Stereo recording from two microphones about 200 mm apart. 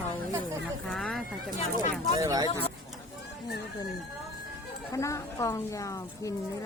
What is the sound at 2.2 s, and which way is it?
Speech, 15° right (ahead or behind).